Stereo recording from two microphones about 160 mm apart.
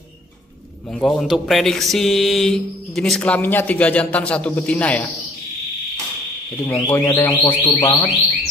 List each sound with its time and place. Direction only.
0.9 s a man's voice: centre (ahead or behind)
6.6 s speech: 10° left (ahead or behind)